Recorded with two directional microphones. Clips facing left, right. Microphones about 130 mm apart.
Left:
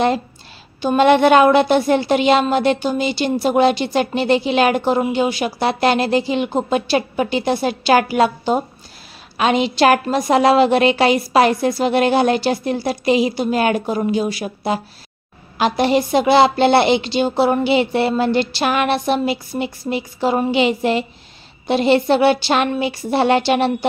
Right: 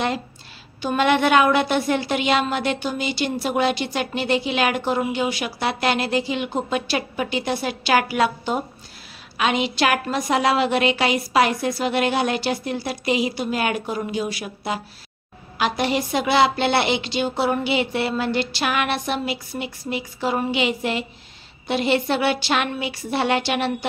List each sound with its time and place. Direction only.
0.8 s a woman's voice: 30° left (ahead or behind)